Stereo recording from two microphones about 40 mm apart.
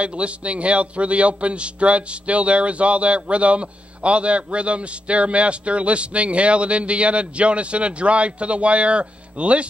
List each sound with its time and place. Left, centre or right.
0.0 s a man's voice: right